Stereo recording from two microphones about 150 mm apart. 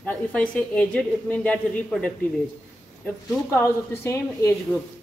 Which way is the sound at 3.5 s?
15° left (ahead or behind).